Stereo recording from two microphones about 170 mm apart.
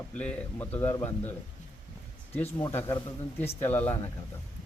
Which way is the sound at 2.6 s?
15° left (ahead or behind).